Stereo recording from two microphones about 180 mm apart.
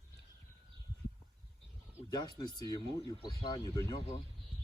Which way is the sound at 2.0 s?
20° left (ahead or behind).